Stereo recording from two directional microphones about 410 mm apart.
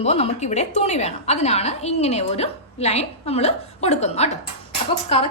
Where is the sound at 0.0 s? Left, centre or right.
Centre.